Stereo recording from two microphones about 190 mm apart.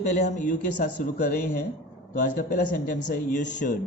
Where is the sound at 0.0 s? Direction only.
35° left (ahead or behind).